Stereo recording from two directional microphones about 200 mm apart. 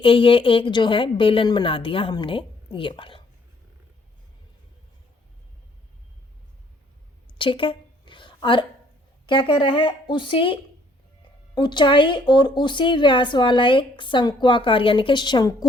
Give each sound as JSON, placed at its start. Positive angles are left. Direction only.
{"t": 0.0, "sound": "a woman's voice", "side_deg": 25}
{"t": 7.3, "sound": "a sound", "side_deg": 25}
{"t": 9.2, "sound": "a woman's voice", "side_deg": 25}